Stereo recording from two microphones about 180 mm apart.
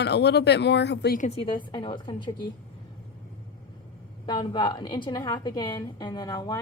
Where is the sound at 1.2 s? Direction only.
30° left (ahead or behind).